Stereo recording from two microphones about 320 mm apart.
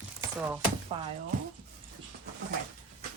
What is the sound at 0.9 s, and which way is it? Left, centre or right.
Speech, centre.